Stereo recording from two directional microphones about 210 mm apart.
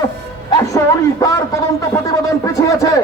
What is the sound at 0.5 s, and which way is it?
Speech, 15° left (ahead or behind).